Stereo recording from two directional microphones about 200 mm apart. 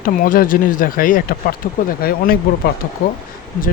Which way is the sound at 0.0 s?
45° left (ahead or behind).